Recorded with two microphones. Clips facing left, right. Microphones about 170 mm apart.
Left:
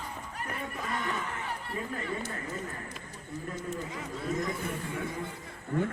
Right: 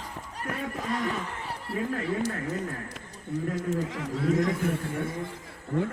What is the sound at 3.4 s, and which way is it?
A man's voice, 85° right.